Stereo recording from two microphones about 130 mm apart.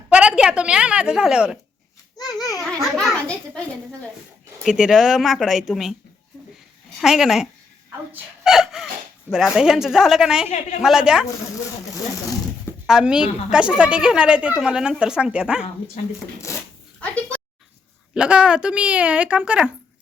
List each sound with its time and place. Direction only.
0.1 s a sound: 10° right (ahead or behind)
2.1 s babbling: 30° left (ahead or behind)
2.8 s a child's voice: 5° left (ahead or behind)
4.6 s speech: 5° right (ahead or behind)
7.0 s speech: 5° right (ahead or behind)
8.4 s a sound: 5° right (ahead or behind)
9.6 s speech: 5° right (ahead or behind)
12.9 s a woman's voice: 5° right (ahead or behind)
18.1 s a woman's voice: 10° right (ahead or behind)